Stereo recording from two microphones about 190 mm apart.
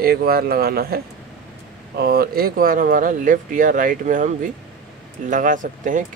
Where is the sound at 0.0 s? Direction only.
55° right (ahead or behind).